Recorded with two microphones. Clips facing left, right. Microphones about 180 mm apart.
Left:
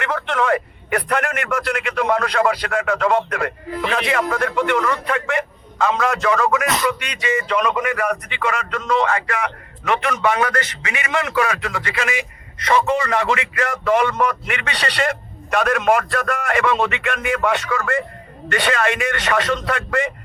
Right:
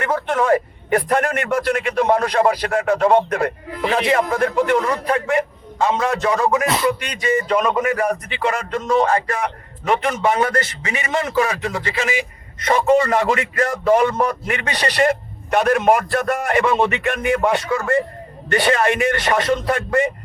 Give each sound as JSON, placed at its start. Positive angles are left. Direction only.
{"t": 0.0, "sound": "a man's voice", "side_deg": -30}
{"t": 12.6, "sound": "a man's voice", "side_deg": -45}